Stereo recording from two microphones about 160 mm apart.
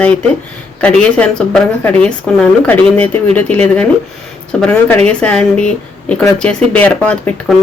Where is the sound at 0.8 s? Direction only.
10° left (ahead or behind).